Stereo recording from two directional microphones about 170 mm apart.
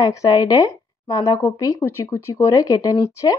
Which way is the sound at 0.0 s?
20° left (ahead or behind).